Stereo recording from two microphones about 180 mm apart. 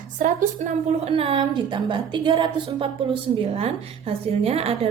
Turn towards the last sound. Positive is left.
turn(degrees=-35)  # may be behind; listen again after turning